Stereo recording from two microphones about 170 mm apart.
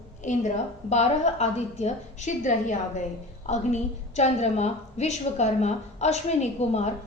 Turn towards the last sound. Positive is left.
turn(degrees=40)  # may be behind; listen again after turning